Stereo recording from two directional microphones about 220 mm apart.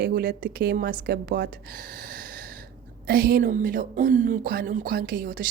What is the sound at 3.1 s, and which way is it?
Speech, 45° right (ahead or behind).